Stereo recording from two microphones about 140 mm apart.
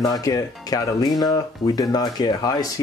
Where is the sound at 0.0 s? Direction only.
25° left (ahead or behind).